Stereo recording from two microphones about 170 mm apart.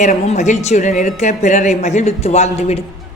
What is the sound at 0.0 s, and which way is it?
Speech, 45° left (ahead or behind).